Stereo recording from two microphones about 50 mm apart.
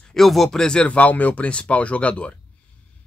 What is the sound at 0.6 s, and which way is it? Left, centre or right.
Speech, centre.